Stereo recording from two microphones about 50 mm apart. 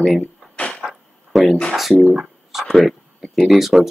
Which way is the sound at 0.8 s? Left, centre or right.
Centre.